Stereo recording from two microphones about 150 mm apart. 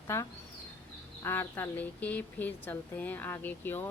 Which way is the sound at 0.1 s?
15° left (ahead or behind).